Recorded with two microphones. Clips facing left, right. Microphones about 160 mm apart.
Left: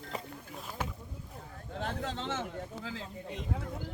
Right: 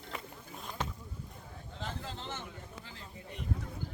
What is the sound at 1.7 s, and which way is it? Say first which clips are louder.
Speech: left 6 dB; 65° left (ahead or behind).